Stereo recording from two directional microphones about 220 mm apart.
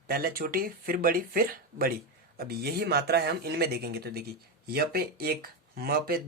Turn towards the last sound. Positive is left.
turn(degrees=-45)  # may be behind; listen again after turning